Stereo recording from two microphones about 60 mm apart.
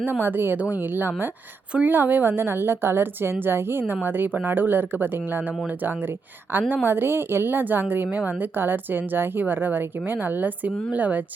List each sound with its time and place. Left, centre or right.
0.0 s a woman's voice: right